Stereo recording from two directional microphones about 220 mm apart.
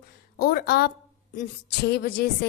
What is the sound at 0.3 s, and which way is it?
A woman's voice, 45° left (ahead or behind).